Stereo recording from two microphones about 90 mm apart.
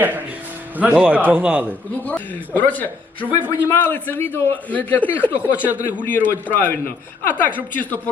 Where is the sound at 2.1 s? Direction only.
20° left (ahead or behind).